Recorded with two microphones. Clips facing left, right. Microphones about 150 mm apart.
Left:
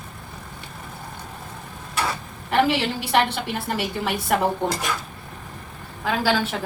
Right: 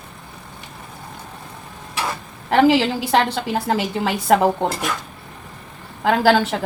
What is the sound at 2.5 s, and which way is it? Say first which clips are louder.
A woman's voice: right 6 dB; 90° right.